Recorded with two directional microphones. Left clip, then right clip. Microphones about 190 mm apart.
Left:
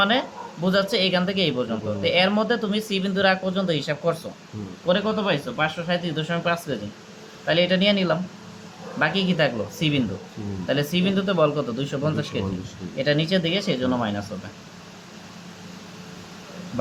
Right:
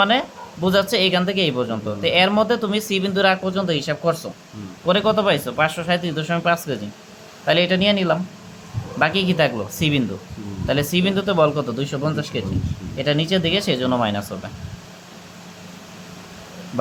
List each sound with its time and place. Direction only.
0.0 s speech: 30° right (ahead or behind)
4.9 s speech: 40° right (ahead or behind)